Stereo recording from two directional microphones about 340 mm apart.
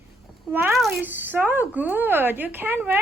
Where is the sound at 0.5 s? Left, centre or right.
Centre.